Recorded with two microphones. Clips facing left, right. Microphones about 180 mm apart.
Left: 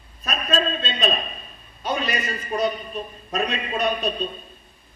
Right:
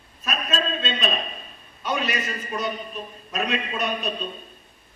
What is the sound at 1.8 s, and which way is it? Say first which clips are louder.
A man's voice: left 1 dB; 35° left (ahead or behind).